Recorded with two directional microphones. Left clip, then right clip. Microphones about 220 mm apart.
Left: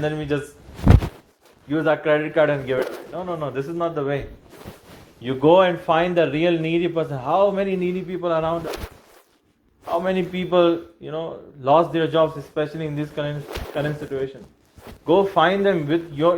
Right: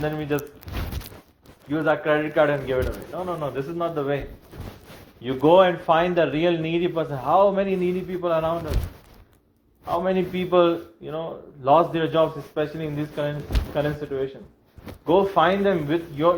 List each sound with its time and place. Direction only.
0.0 s speech: 55° left (ahead or behind)
1.7 s speech: 50° left (ahead or behind)
5.2 s speech: 50° left (ahead or behind)
10.0 s speech: 50° left (ahead or behind)